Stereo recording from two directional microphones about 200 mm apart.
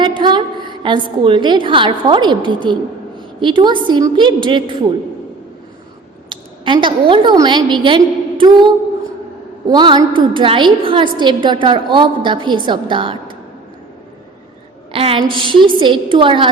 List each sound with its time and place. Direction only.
0.0 s a woman's voice: 25° right (ahead or behind)
3.2 s a sound: 25° right (ahead or behind)
3.8 s a woman's voice: 20° right (ahead or behind)
6.2 s a woman's voice: 25° right (ahead or behind)
14.9 s a sound: 30° right (ahead or behind)
15.3 s a woman's voice: 25° right (ahead or behind)